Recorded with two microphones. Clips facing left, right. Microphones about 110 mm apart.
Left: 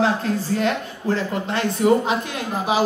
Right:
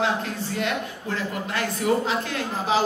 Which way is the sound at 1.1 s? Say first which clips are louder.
Left 7 dB; 35° left (ahead or behind).